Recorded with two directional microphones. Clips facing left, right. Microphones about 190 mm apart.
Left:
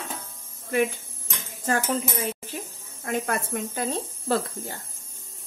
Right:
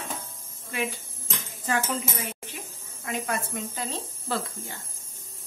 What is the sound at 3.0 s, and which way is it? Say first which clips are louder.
Speech: left 3 dB; 50° left (ahead or behind).